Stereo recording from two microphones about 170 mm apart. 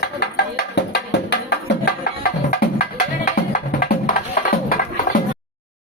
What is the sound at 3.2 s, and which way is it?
Music, 55° left (ahead or behind).